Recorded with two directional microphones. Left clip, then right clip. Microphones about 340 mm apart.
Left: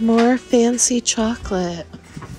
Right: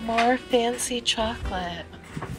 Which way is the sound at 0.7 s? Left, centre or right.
Left.